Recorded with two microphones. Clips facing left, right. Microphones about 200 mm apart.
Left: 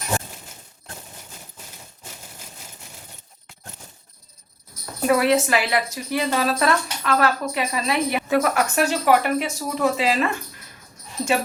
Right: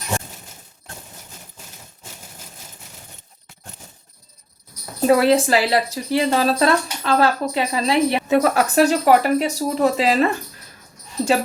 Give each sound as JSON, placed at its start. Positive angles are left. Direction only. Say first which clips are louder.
{"t": 4.9, "sound": "a woman's voice", "louder": "right 4 dB", "side_deg": -30}